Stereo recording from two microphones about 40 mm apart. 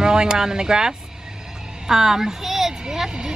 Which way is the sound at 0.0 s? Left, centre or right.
Centre.